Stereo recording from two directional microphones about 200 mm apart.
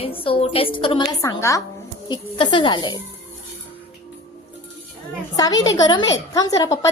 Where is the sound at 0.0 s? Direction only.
25° left (ahead or behind).